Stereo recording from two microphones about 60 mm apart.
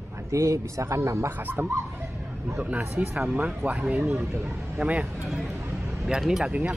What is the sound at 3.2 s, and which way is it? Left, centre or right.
Speech, centre.